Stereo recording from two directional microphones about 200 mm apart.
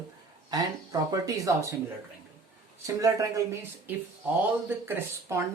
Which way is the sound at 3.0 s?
15° right (ahead or behind).